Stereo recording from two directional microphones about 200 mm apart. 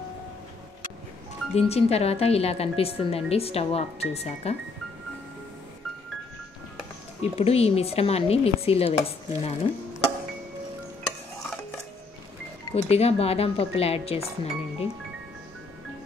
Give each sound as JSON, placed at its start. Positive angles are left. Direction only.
{"t": 1.5, "sound": "speech", "side_deg": 30}
{"t": 7.2, "sound": "speech", "side_deg": 30}
{"t": 12.7, "sound": "speech", "side_deg": 30}